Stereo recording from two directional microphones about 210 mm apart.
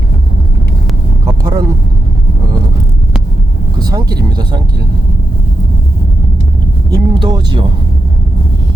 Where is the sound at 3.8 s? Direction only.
20° right (ahead or behind).